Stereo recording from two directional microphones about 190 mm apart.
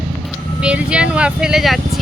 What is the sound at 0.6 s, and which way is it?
A woman's voice, 5° right (ahead or behind).